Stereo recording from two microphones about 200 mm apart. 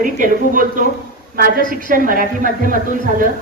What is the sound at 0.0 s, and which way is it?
A woman's voice, 45° right (ahead or behind).